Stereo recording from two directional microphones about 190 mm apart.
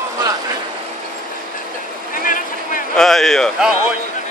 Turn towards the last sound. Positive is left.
turn(degrees=0)  # may be behind; listen again after turning